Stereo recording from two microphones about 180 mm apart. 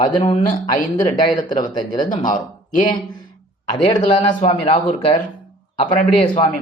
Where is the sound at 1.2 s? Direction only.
25° left (ahead or behind).